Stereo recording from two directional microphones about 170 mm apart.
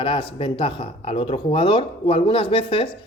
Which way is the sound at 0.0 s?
30° left (ahead or behind).